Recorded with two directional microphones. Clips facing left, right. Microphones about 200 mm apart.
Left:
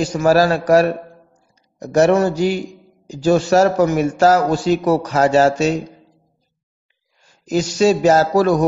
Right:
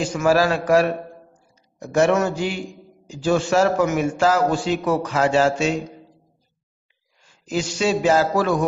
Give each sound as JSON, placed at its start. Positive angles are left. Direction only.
{"t": 0.0, "sound": "a man's voice", "side_deg": 40}
{"t": 7.2, "sound": "a man's voice", "side_deg": 40}